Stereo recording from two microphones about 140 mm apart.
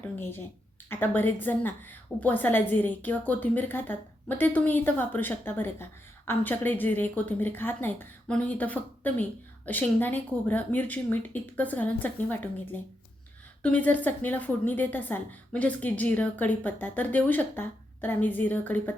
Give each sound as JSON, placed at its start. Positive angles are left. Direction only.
{"t": 0.2, "sound": "a woman's voice", "side_deg": 15}
{"t": 13.6, "sound": "a woman's voice", "side_deg": 10}